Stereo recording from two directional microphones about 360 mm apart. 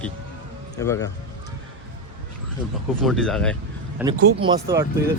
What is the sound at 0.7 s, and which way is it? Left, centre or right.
Speech, centre.